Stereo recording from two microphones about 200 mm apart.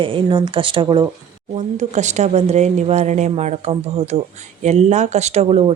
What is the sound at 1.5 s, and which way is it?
Speech, 35° right (ahead or behind).